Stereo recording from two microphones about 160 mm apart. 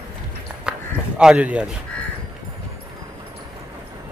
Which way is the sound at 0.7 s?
5° right (ahead or behind).